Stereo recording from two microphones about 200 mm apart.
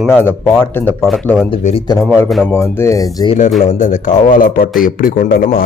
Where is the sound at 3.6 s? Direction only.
35° left (ahead or behind).